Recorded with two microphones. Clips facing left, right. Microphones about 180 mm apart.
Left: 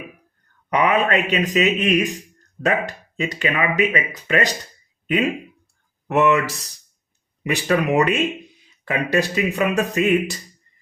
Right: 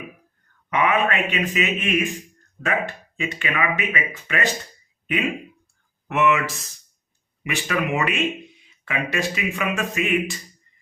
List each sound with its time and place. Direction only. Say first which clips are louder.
0.7 s speech: left 3 dB; 40° left (ahead or behind)
6.1 s speech: left 3 dB; 40° left (ahead or behind)